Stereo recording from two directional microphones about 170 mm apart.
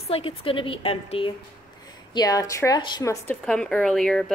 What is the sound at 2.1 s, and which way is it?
A woman's voice, 20° left (ahead or behind).